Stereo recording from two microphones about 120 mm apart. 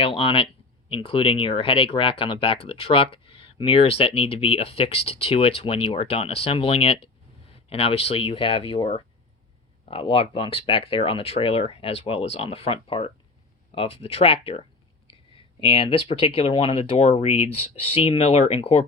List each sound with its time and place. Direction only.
0.2 s speech: 50° left (ahead or behind)
15.0 s speech: 45° left (ahead or behind)